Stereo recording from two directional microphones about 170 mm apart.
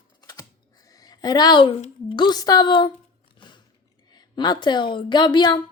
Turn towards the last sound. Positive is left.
turn(degrees=25)  # may be behind; listen again after turning